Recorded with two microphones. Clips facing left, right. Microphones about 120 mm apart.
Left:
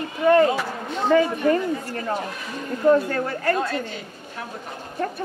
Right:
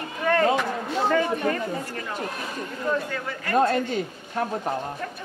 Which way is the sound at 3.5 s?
40° right (ahead or behind).